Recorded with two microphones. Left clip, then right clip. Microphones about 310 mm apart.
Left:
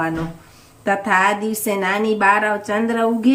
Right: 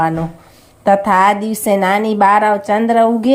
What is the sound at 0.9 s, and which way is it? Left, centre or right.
Speech, right.